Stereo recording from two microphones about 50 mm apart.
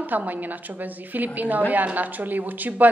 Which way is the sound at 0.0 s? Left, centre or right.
Right.